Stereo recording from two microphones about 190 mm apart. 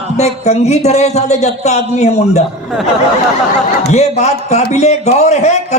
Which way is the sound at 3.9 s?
35° left (ahead or behind).